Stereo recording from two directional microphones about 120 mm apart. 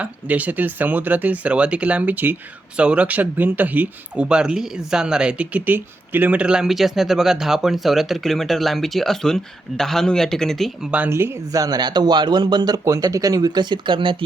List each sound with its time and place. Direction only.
0.0 s speech: 15° right (ahead or behind); by 10.7 s 5° left (ahead or behind)
10.9 s speech: 15° right (ahead or behind); by 14.3 s 45° right (ahead or behind)